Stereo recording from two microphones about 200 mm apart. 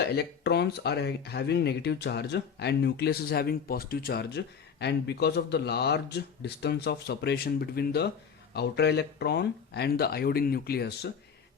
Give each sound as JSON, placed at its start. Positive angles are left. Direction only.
{"t": 0.1, "sound": "speech", "side_deg": 55}